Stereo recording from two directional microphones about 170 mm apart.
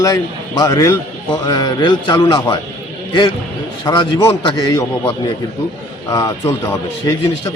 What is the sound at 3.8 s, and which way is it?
A man's voice, 25° left (ahead or behind).